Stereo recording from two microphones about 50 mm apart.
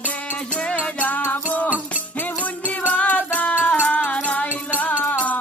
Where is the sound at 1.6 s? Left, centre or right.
Right.